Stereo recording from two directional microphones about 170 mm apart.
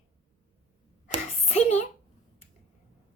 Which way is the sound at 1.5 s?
40° left (ahead or behind).